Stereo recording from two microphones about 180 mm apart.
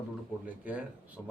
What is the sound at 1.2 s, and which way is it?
Speech, centre (ahead or behind).